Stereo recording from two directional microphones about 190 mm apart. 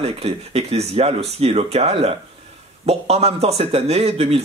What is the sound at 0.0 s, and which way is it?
Speech, 30° right (ahead or behind).